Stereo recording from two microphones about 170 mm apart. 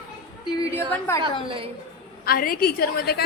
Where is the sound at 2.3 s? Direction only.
60° left (ahead or behind).